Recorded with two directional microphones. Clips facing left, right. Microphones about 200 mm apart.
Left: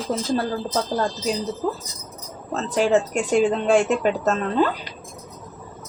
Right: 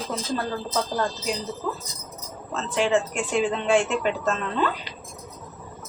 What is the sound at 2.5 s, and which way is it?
Speech, 40° left (ahead or behind).